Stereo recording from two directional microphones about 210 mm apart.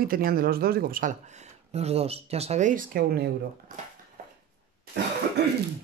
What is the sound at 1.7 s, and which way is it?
Speech, 30° right (ahead or behind).